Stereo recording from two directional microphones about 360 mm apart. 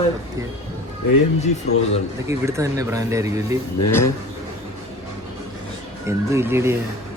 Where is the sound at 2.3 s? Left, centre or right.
Centre.